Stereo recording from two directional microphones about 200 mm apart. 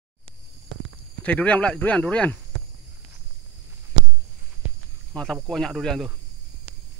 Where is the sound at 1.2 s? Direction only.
5° left (ahead or behind).